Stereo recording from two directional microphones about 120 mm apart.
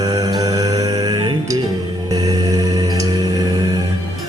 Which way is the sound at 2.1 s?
30° right (ahead or behind).